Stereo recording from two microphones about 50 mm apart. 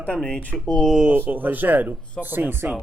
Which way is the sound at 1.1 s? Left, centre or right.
Right.